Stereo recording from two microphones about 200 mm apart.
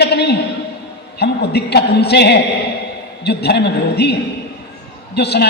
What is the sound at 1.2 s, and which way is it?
Speech, 55° left (ahead or behind).